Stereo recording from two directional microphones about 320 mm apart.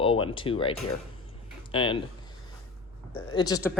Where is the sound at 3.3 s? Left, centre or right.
Centre.